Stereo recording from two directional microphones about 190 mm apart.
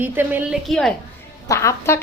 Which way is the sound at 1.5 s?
15° left (ahead or behind).